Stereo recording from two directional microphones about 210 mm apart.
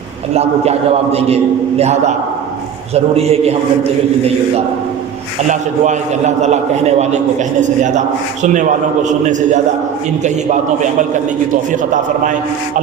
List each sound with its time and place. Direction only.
0.3 s a man's voice: 30° right (ahead or behind)
5.5 s a man's voice: 35° right (ahead or behind)
12.2 s a man's voice: 40° right (ahead or behind)